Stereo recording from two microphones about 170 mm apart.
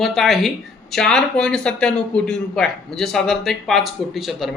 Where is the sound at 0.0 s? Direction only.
Centre (ahead or behind).